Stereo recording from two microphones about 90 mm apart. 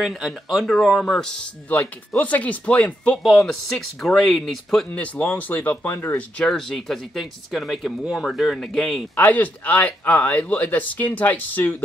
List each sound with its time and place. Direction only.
0.0 s speech: centre (ahead or behind)
1.7 s speech: 20° left (ahead or behind)
3.2 s speech: centre (ahead or behind)
4.9 s speech: 15° left (ahead or behind)
6.1 s speech: 10° left (ahead or behind)
9.1 s speech: 20° left (ahead or behind)